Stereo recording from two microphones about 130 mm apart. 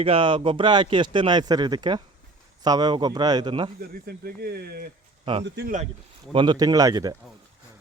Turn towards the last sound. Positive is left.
turn(degrees=-25)  # may be behind; listen again after turning